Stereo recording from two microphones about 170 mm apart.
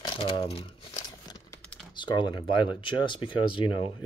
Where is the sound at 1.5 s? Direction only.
5° left (ahead or behind).